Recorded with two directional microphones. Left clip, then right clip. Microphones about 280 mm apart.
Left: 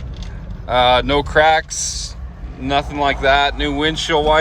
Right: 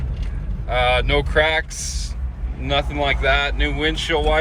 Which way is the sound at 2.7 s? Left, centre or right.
Centre.